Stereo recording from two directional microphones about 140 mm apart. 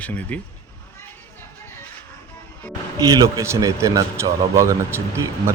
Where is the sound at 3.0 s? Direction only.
25° right (ahead or behind).